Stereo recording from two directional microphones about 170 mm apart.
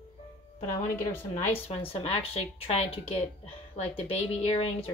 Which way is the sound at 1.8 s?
35° left (ahead or behind).